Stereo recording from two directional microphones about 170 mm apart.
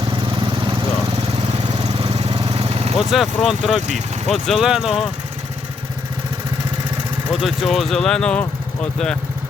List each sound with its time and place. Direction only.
1.6 s vehicle: 35° right (ahead or behind)
3.0 s speech: centre (ahead or behind)
7.4 s speech: centre (ahead or behind)